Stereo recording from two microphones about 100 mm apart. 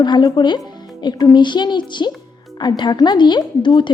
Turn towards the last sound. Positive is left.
turn(degrees=50)  # may be behind; listen again after turning